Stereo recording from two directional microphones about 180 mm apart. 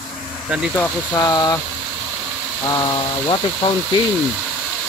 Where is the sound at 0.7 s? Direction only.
15° left (ahead or behind).